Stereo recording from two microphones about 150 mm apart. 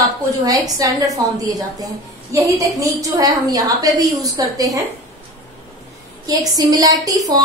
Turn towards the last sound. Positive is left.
turn(degrees=-25)  # may be behind; listen again after turning